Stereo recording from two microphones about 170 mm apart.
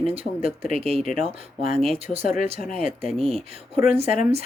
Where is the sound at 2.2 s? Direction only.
50° left (ahead or behind).